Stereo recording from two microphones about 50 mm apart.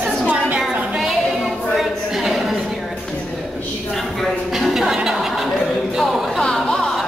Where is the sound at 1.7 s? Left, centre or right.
Centre.